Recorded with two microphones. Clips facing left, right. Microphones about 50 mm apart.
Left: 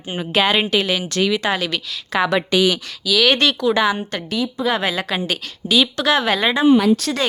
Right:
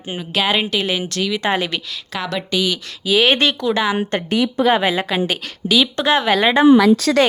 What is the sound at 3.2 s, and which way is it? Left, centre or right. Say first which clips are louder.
Speech: even; centre.